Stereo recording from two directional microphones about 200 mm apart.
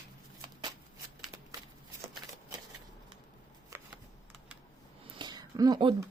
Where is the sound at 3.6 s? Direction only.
10° right (ahead or behind).